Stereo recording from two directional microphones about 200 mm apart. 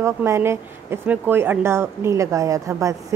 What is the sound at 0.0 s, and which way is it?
A woman's voice, 15° right (ahead or behind).